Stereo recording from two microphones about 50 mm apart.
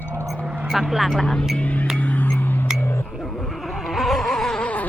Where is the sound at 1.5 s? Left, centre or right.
Left.